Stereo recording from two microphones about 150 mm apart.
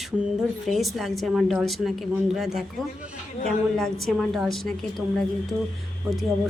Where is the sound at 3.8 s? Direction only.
Centre (ahead or behind).